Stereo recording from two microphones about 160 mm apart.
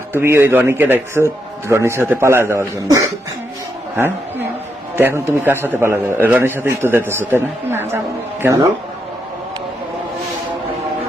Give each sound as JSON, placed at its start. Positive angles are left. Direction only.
{"t": 0.1, "sound": "a man's voice", "side_deg": -15}
{"t": 3.9, "sound": "a sound", "side_deg": -10}
{"t": 4.9, "sound": "a man's voice", "side_deg": -15}